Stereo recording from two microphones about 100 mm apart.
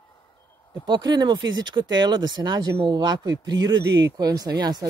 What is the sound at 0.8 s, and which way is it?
Speech, 45° right (ahead or behind).